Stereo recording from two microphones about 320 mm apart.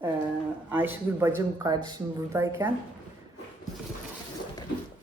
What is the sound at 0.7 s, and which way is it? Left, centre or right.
Speech, centre.